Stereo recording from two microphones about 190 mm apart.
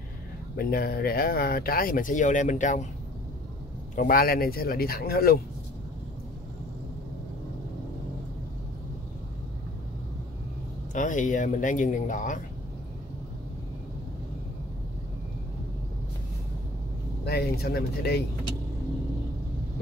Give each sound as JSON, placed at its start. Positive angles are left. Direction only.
{"t": 0.6, "sound": "speech", "side_deg": 50}
{"t": 3.9, "sound": "speech", "side_deg": 50}
{"t": 10.9, "sound": "speech", "side_deg": 40}
{"t": 17.2, "sound": "speech", "side_deg": 60}